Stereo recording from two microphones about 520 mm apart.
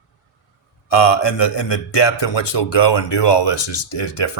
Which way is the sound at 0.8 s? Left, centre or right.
Left.